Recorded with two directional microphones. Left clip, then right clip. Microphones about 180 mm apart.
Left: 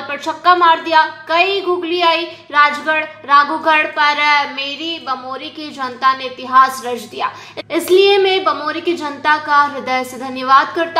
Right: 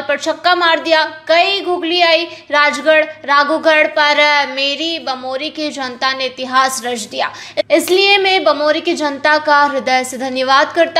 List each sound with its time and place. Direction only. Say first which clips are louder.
0.1 s a woman's voice: even; 35° right (ahead or behind)